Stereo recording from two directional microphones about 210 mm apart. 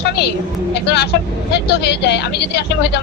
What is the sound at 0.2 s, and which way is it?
Speech, 50° left (ahead or behind).